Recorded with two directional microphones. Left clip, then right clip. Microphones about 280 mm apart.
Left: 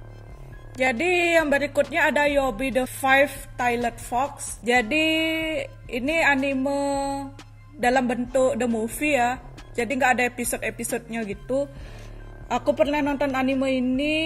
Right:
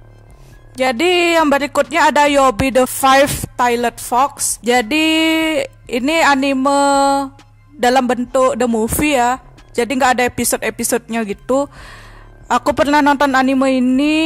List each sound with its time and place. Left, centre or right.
0.7 s a woman's voice: right